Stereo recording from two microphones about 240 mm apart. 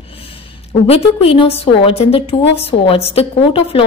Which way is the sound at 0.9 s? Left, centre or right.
Left.